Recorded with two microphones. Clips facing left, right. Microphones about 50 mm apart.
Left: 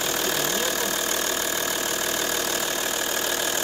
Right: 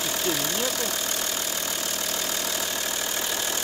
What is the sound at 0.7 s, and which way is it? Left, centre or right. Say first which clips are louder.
Engine: left 3 dB; left.